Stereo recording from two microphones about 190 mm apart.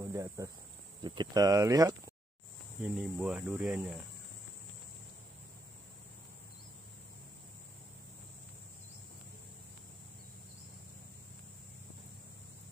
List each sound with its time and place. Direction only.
0.0 s cricket: 15° right (ahead or behind)
1.0 s speech: 25° right (ahead or behind)
2.8 s speech: 5° right (ahead or behind)